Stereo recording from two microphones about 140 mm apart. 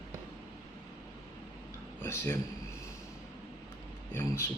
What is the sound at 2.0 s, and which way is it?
Speech, 15° left (ahead or behind).